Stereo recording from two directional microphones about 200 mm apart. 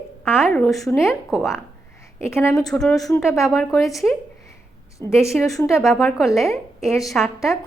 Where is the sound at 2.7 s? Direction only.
Centre (ahead or behind).